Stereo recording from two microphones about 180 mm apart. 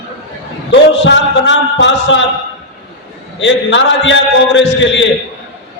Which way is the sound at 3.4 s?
90° left.